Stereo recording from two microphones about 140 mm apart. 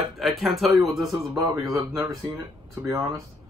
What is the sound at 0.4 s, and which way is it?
Speech, centre (ahead or behind).